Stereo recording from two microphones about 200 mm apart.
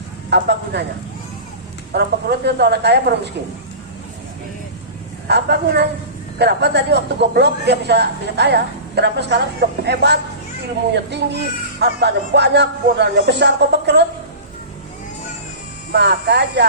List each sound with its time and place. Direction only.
0.3 s a man's voice: 55° right (ahead or behind)
1.9 s a man's voice: 55° right (ahead or behind)
5.3 s a man's voice: 55° right (ahead or behind)
15.9 s a man's voice: 55° right (ahead or behind)